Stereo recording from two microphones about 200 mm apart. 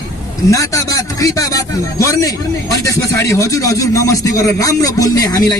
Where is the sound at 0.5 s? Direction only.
15° left (ahead or behind).